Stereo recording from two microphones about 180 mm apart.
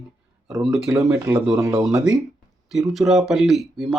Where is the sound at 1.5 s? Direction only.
15° right (ahead or behind).